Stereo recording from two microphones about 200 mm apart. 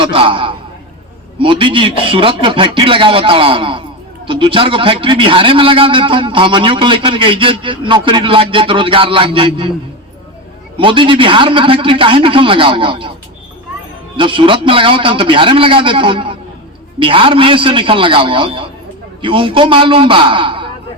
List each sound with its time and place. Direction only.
0.0 s a man's voice: 25° right (ahead or behind)
10.8 s a man's voice: 25° right (ahead or behind)
14.2 s a man's voice: 25° right (ahead or behind)